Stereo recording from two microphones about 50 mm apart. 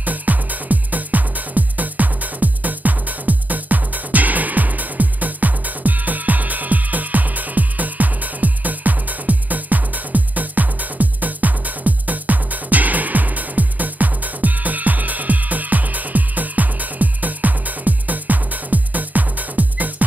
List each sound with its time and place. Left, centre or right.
0.0 s music: right